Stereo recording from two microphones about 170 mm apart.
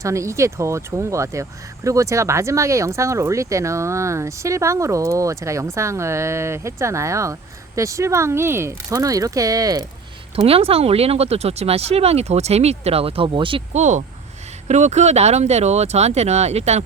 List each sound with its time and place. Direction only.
0.0 s speech: 15° right (ahead or behind)
10.3 s speech: 35° right (ahead or behind)
13.7 s speech: 45° right (ahead or behind)